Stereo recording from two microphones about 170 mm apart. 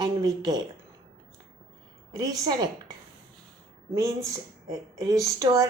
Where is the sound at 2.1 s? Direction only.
20° right (ahead or behind).